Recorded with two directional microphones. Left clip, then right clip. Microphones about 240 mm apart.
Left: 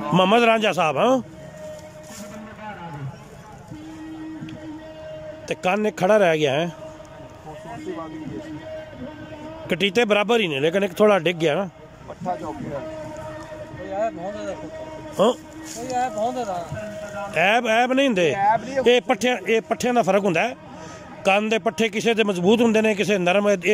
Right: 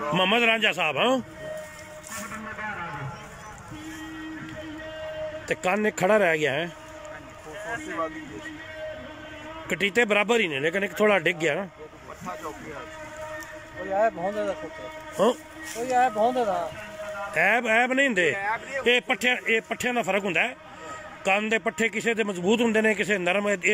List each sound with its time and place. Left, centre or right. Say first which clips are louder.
0.1 s a man's voice: left 5 dB; centre
5.5 s a man's voice: left 3 dB; centre
9.7 s a man's voice: left 3 dB; centre
13.8 s speech: right 2 dB; centre
15.2 s a man's voice: left 4 dB; centre
15.9 s a man's voice: right 2 dB; centre
18.3 s speech: left 8 dB; left
18.9 s a man's voice: left 4 dB; centre